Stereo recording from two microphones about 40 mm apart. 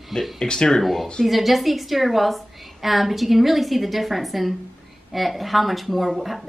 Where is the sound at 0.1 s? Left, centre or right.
Centre.